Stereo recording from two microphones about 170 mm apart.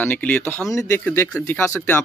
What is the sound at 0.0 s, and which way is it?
Speech, 10° left (ahead or behind).